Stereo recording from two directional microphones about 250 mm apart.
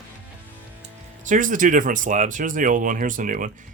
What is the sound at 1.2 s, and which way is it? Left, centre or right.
Speech, right.